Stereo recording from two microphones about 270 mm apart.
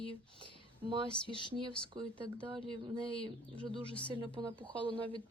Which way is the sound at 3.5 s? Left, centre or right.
Centre.